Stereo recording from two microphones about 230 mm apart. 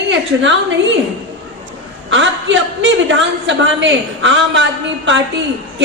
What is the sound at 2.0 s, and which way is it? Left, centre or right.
A woman's voice, right.